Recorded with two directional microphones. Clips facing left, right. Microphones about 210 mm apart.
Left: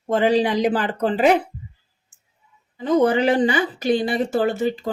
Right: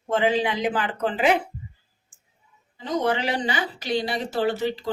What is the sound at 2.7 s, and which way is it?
Speech, 50° left (ahead or behind).